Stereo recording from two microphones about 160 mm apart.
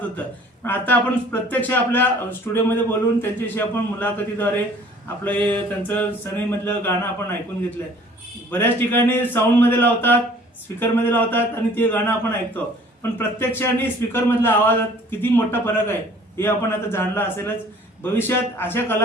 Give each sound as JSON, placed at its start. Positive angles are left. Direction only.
{"t": 0.2, "sound": "speech", "side_deg": 10}